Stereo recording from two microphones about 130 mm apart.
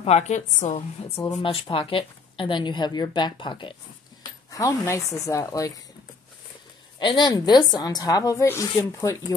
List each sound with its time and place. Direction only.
0.0 s a woman's voice: 60° left (ahead or behind)
1.4 s a woman's voice: 45° left (ahead or behind)
4.6 s a woman's voice: 25° left (ahead or behind)
7.0 s a woman's voice: 35° left (ahead or behind)